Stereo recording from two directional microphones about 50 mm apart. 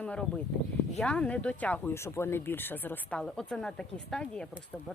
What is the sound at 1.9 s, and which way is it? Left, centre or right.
A woman's voice, left.